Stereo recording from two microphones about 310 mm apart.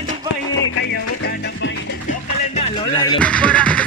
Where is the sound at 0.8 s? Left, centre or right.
Left.